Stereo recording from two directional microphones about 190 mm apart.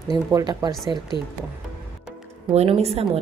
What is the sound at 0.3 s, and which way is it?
Speech, 20° right (ahead or behind).